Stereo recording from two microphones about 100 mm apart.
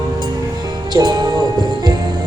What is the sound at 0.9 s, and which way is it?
Music, 45° right (ahead or behind).